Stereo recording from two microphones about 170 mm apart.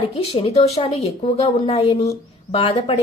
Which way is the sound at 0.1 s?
35° left (ahead or behind).